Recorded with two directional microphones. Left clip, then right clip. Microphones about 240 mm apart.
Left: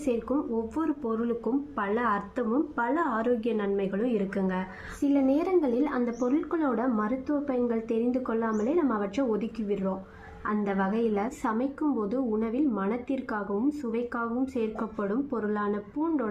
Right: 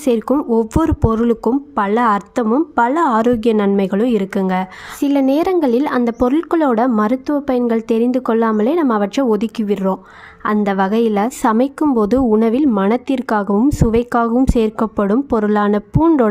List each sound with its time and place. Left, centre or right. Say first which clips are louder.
0.0 s speech: right 13 dB; right